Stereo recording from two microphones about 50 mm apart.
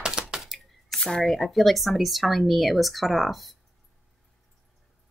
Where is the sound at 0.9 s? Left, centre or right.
Centre.